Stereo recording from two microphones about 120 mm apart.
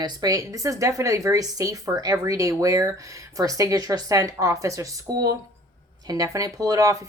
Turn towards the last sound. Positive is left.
turn(degrees=-30)  # may be behind; listen again after turning